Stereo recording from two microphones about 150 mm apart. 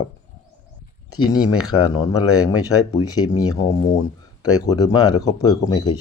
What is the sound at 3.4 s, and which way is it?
Speech, 25° left (ahead or behind).